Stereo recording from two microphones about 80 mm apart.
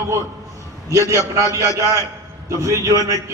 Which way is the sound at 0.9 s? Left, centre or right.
Right.